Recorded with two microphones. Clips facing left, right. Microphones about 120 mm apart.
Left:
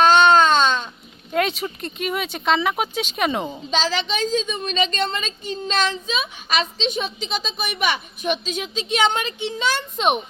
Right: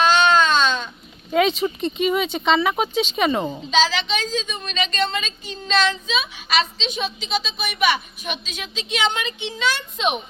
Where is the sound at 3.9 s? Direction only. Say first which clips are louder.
Left 2 dB; 45° left (ahead or behind).